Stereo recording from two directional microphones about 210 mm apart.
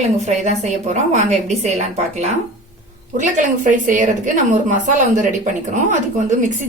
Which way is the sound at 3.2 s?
35° right (ahead or behind).